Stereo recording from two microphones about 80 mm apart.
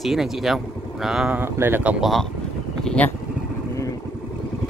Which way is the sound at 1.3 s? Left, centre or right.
Right.